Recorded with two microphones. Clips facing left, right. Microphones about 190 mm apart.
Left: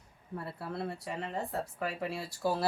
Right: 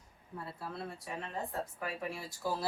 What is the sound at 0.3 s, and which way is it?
Speech, 65° left (ahead or behind).